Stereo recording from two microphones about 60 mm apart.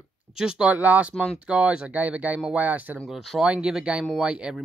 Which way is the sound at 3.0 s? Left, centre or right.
Centre.